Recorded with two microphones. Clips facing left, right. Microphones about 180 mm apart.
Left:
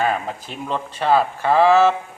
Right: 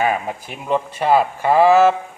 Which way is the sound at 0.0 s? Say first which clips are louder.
Right 2 dB; 10° right (ahead or behind).